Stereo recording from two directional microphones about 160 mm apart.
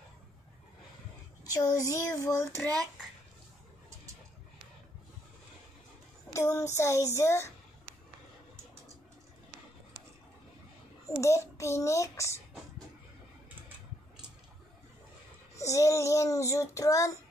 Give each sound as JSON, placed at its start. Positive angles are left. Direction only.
{"t": 1.5, "sound": "child singing", "side_deg": 20}
{"t": 6.3, "sound": "child singing", "side_deg": 20}
{"t": 11.1, "sound": "child singing", "side_deg": 20}
{"t": 15.5, "sound": "child singing", "side_deg": 20}